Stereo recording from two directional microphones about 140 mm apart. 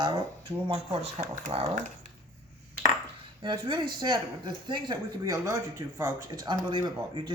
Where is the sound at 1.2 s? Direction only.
50° right (ahead or behind).